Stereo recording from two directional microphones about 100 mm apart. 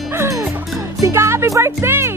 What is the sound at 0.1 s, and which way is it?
Music, 25° right (ahead or behind).